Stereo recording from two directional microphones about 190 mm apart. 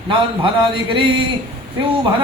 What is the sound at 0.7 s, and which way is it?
Speech, 25° right (ahead or behind).